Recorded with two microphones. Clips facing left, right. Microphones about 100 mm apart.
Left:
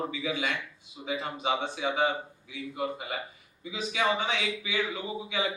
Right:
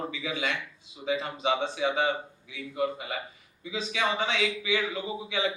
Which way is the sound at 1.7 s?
30° left (ahead or behind).